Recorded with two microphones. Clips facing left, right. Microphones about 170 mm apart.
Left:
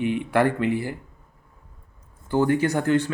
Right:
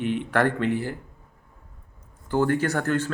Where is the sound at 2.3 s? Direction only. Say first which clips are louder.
Left 2 dB; 15° left (ahead or behind).